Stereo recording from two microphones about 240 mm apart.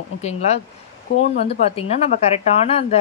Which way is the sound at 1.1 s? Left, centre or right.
Left.